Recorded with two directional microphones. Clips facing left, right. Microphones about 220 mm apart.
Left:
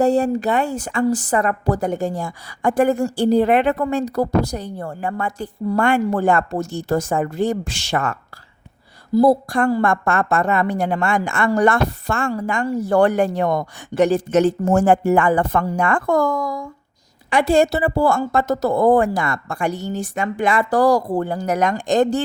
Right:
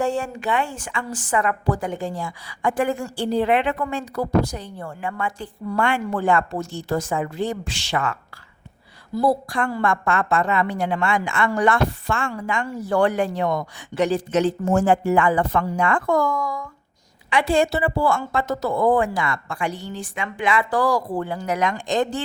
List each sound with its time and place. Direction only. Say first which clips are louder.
0.0 s a woman's voice: left 7 dB; 40° left (ahead or behind)